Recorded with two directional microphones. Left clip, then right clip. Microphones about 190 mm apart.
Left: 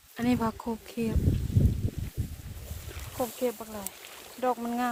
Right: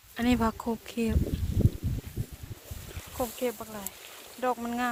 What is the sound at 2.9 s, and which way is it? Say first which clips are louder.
Speech: left 1 dB; 5° left (ahead or behind).